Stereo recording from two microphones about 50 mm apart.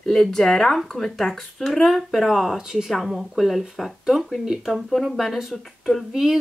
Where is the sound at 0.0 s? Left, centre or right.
Centre.